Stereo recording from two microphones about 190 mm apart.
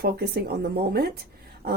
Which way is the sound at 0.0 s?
55° right (ahead or behind).